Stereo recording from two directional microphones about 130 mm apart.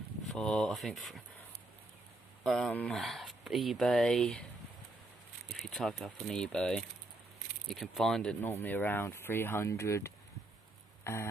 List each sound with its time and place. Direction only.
0.3 s speech: 5° left (ahead or behind)
2.4 s speech: centre (ahead or behind)
5.5 s speech: centre (ahead or behind); by 10.1 s 20° left (ahead or behind)